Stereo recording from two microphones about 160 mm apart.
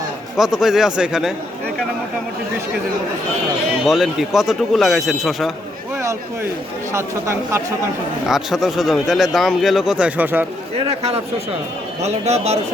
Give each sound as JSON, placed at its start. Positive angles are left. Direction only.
{"t": 0.3, "sound": "speech", "side_deg": 0}
{"t": 3.8, "sound": "speech", "side_deg": 0}
{"t": 6.0, "sound": "speech", "side_deg": -15}
{"t": 8.3, "sound": "speech", "side_deg": 0}
{"t": 10.8, "sound": "a man's voice", "side_deg": -40}